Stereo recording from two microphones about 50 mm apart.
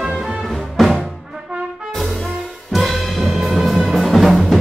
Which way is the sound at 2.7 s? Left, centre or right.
Centre.